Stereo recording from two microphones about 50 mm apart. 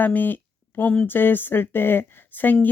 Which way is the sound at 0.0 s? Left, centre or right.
Left.